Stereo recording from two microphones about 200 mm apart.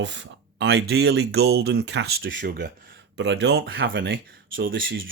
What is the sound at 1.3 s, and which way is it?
Speech, 55° right (ahead or behind).